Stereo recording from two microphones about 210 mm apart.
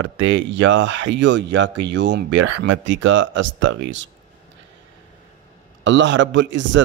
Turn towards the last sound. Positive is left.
turn(degrees=-60)  # may be behind; listen again after turning